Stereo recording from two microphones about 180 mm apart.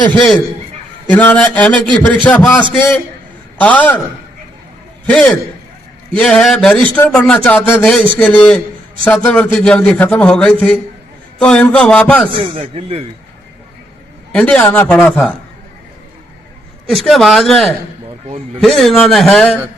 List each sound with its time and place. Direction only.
0.1 s a man's voice: 10° left (ahead or behind)
5.0 s a man's voice: 5° left (ahead or behind)
12.3 s speech: 30° right (ahead or behind)
14.3 s a man's voice: 5° left (ahead or behind)
16.8 s a man's voice: centre (ahead or behind)